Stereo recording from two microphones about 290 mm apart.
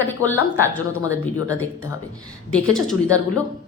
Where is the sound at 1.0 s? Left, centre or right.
Centre.